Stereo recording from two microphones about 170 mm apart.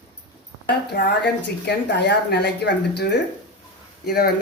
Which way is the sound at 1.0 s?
90° left.